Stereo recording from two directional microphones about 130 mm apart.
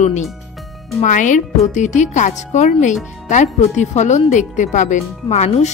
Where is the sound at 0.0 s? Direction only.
65° left (ahead or behind).